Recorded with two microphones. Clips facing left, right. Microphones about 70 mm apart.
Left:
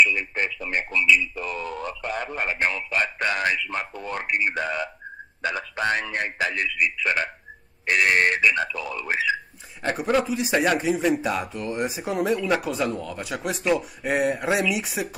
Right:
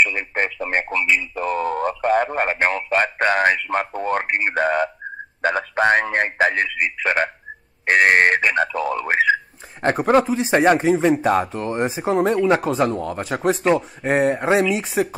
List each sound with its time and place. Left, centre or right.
0.0 s speech: right